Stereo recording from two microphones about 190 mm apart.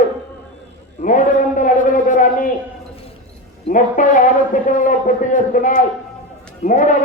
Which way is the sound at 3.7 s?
45° left (ahead or behind).